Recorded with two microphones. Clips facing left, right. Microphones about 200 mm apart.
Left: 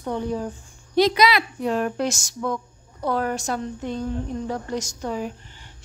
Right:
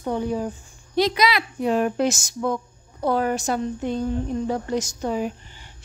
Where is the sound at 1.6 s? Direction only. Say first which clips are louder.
Right 2 dB; 15° right (ahead or behind).